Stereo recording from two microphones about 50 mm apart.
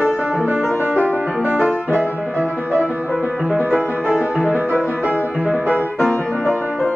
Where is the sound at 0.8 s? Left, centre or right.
Right.